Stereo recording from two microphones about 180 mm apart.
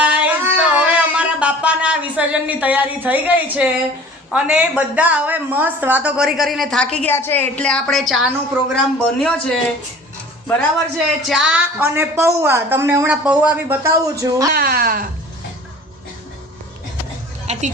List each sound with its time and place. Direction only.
0.0 s music: 5° right (ahead or behind)
4.3 s speech: 5° right (ahead or behind)
11.3 s a woman's voice: 5° right (ahead or behind)
14.5 s speech: 55° right (ahead or behind)
17.4 s a sound: 40° right (ahead or behind)